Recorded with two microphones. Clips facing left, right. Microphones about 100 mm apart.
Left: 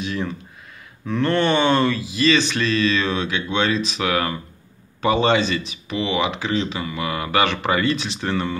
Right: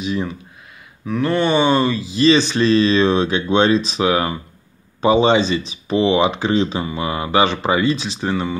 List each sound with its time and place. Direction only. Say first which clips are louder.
0.0 s speech: right 3 dB; 15° right (ahead or behind)
1.0 s speech: right 1 dB; 5° right (ahead or behind)
2.0 s speech: right 4 dB; 30° right (ahead or behind)